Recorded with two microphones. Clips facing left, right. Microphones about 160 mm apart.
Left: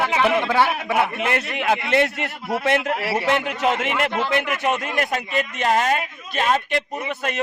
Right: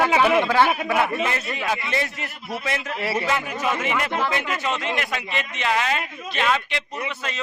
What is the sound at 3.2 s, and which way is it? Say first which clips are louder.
Speech: left 4 dB; 70° left (ahead or behind).